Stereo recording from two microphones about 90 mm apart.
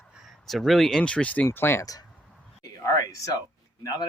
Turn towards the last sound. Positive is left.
turn(degrees=40)  # may be behind; listen again after turning